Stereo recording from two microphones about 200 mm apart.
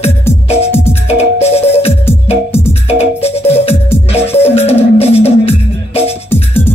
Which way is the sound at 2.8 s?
30° left (ahead or behind).